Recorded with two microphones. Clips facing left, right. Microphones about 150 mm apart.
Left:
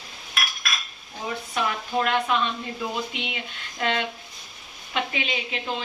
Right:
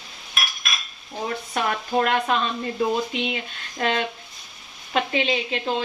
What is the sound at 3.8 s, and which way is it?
A woman's voice, 40° right (ahead or behind).